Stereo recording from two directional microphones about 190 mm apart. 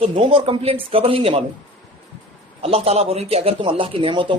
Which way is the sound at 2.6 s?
30° right (ahead or behind).